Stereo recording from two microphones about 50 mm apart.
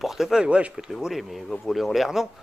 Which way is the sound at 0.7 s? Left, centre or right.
Centre.